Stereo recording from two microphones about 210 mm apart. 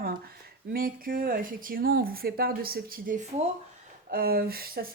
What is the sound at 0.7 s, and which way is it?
Speech, 45° right (ahead or behind).